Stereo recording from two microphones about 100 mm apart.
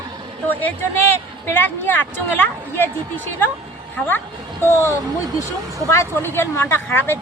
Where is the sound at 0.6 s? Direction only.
20° left (ahead or behind).